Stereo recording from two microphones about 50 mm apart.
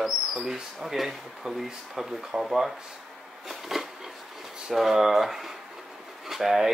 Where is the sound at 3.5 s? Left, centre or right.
Centre.